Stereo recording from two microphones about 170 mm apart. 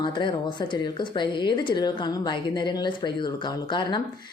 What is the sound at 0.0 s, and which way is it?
Speech, 30° left (ahead or behind).